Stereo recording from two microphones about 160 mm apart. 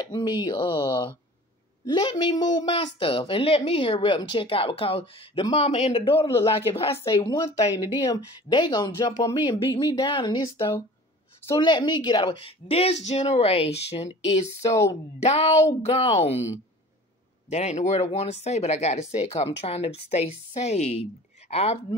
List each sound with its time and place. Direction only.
0.0 s speech: 25° left (ahead or behind)
7.0 s speech: 20° left (ahead or behind)
11.6 s speech: 30° left (ahead or behind)
17.5 s speech: 45° left (ahead or behind)